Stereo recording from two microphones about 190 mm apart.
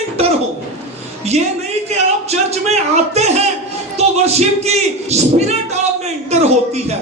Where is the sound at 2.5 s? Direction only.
35° right (ahead or behind).